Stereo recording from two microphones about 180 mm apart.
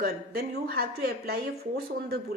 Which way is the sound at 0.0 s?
55° right (ahead or behind).